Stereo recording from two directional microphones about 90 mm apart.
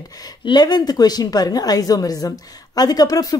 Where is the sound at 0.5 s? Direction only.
50° left (ahead or behind).